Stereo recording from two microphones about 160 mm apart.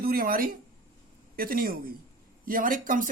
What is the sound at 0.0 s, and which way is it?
Speech, 65° right (ahead or behind).